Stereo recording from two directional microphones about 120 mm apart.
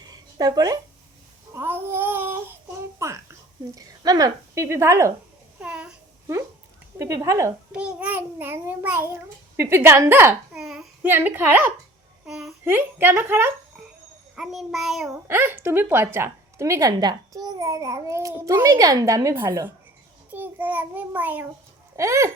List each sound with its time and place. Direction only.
0.1 s a sound: 35° right (ahead or behind)
1.5 s child singing: 20° right (ahead or behind)
3.0 s a sound: 25° right (ahead or behind)
3.8 s a child's voice: 30° right (ahead or behind)
5.5 s babbling: 10° right (ahead or behind)
7.0 s a child's voice: 30° right (ahead or behind)
7.7 s a child's voice: 10° right (ahead or behind)
10.5 s a child's voice: 5° right (ahead or behind)
11.1 s a child's voice: 15° right (ahead or behind)
12.2 s a child's voice: 5° right (ahead or behind)
12.6 s a child's voice: 20° right (ahead or behind)
14.3 s child singing: centre (ahead or behind)
15.3 s a child's voice: 15° right (ahead or behind)
21.9 s a child's voice: 25° right (ahead or behind)